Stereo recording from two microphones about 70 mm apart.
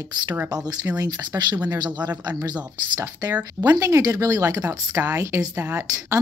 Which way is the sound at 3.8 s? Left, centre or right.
Right.